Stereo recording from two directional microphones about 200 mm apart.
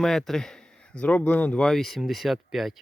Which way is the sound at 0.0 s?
Centre (ahead or behind).